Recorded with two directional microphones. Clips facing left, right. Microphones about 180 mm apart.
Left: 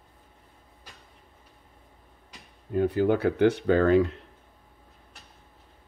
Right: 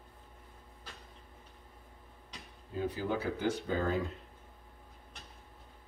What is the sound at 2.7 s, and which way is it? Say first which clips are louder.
Speech: left 11 dB; 60° left (ahead or behind).